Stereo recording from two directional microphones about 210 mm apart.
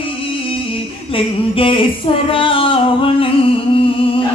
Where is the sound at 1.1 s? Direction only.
25° left (ahead or behind).